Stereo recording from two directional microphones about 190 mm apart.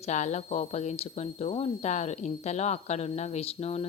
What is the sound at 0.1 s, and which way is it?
A woman's voice, 40° left (ahead or behind).